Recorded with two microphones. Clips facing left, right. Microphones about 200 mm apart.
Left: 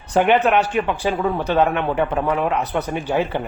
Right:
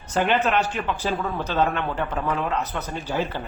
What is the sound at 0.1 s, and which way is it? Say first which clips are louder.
Speech: left 6 dB; 10° left (ahead or behind).